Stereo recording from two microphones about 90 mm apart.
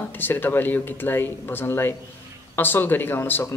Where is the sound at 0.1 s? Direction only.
20° left (ahead or behind).